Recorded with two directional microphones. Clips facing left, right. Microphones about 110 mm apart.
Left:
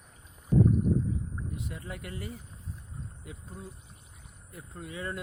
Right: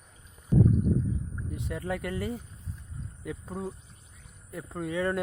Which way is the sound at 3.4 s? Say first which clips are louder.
Right 9 dB; 90° right.